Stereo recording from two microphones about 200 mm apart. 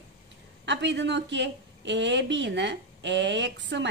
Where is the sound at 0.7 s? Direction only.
60° right (ahead or behind).